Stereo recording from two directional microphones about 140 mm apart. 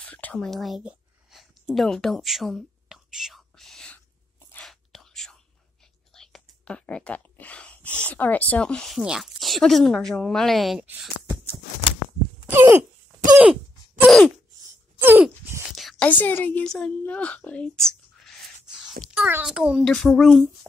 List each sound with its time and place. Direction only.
0.0 s a sound: 10° left (ahead or behind)
4.6 s whispering: centre (ahead or behind)
6.1 s speech: 5° left (ahead or behind)
12.4 s a sound: 15° right (ahead or behind)
13.4 s groan: 5° right (ahead or behind)
15.0 s groan: 15° right (ahead or behind)
15.7 s whispering: centre (ahead or behind)
16.1 s a woman's voice: 10° left (ahead or behind)
19.0 s a child's voice: 10° right (ahead or behind)